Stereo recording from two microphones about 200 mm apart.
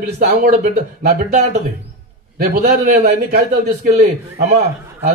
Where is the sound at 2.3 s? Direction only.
40° right (ahead or behind).